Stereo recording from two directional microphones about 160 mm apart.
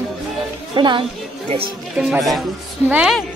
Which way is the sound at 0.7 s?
30° right (ahead or behind).